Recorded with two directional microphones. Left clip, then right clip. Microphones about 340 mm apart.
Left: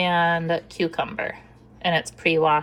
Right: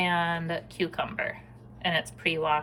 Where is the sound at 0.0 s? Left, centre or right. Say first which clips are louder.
Left 6 dB; centre.